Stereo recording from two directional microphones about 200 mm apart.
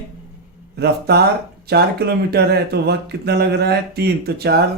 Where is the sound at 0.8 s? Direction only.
55° right (ahead or behind).